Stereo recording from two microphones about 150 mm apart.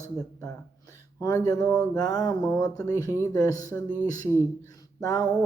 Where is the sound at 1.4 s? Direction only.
25° left (ahead or behind).